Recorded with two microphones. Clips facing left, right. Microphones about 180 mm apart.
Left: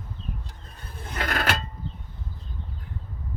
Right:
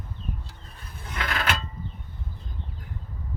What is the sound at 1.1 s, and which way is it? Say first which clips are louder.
Coin: left 2 dB; 45° left (ahead or behind).